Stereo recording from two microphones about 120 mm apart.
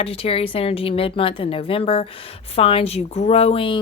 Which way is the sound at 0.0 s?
55° left (ahead or behind).